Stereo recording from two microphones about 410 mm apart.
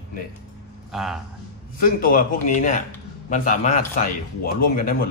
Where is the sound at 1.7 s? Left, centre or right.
Left.